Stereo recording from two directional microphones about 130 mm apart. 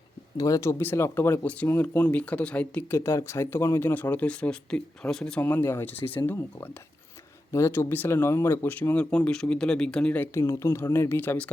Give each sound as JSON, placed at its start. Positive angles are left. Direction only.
{"t": 0.3, "sound": "speech", "side_deg": 25}
{"t": 3.0, "sound": "speech", "side_deg": 20}